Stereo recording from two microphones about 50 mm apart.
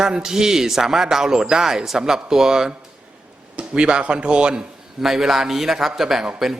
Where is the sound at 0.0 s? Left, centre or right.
Centre.